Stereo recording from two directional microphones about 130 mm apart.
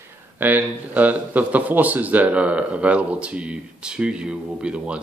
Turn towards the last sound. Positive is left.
turn(degrees=-10)  # may be behind; listen again after turning